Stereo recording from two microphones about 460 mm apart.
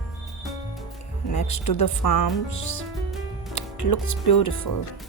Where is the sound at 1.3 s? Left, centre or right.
Left.